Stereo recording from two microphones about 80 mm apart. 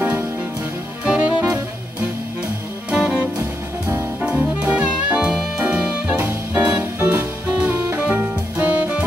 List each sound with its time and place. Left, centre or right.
1.0 s saxophone: centre
2.9 s music: centre
3.3 s music: right